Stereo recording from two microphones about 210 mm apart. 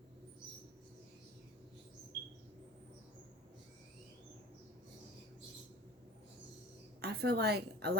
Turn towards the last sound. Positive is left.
turn(degrees=-50)  # may be behind; listen again after turning